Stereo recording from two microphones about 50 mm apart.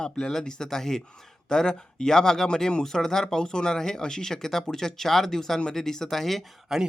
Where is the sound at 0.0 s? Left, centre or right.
Centre.